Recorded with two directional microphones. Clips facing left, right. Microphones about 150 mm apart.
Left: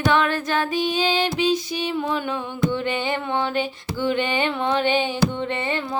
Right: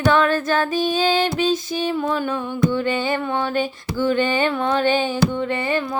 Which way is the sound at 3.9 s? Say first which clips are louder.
Right 3 dB; 15° left (ahead or behind).